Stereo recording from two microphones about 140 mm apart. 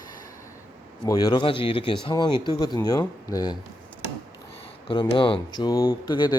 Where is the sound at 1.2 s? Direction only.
35° left (ahead or behind).